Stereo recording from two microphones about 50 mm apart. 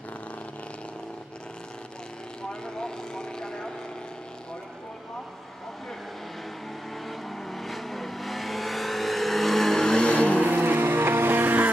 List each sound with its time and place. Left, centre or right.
2.6 s vehicle: centre
7.1 s vehicle: centre
10.0 s vehicle: left
10.4 s vehicle: right